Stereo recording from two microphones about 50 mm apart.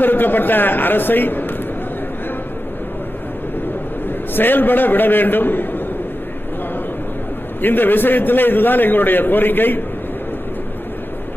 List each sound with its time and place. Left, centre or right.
0.0 s a woman's voice: left
4.4 s a man's voice: left
7.6 s a man's voice: left